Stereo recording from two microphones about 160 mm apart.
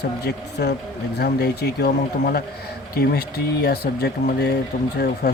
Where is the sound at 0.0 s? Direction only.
90° left.